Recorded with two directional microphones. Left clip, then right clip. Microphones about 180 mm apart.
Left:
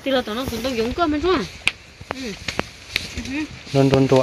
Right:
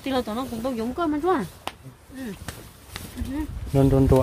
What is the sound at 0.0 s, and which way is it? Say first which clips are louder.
Speech: left 5 dB; 65° right (ahead or behind).